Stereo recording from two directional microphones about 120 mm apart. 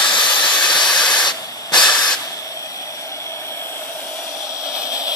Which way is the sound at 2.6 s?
25° left (ahead or behind).